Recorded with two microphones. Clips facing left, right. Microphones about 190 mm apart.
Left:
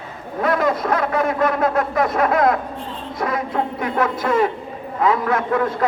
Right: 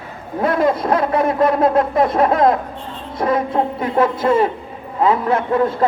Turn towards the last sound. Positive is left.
turn(degrees=-30)  # may be behind; listen again after turning